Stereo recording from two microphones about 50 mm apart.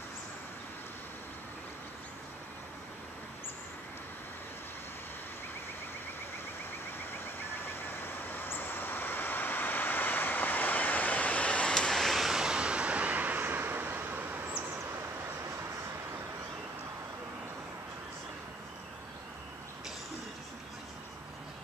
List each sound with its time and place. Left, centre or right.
7.0 s vehicle: left; by 14.6 s right